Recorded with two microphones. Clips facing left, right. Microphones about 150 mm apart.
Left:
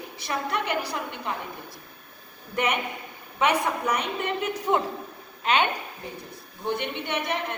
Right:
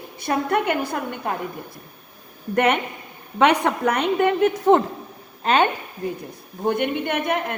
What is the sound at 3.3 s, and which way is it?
A woman's voice, 65° right (ahead or behind).